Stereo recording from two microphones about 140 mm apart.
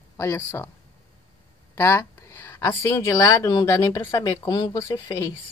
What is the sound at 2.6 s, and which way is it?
A woman's voice, 20° left (ahead or behind).